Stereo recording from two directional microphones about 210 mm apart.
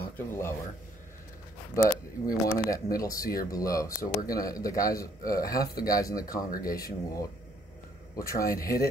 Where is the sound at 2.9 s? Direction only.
15° left (ahead or behind).